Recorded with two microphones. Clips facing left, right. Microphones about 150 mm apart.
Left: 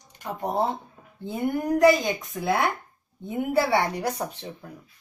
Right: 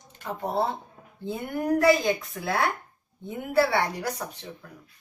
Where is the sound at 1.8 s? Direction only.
20° left (ahead or behind).